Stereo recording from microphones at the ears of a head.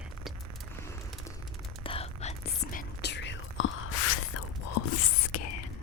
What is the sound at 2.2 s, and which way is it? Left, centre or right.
Whispering, left.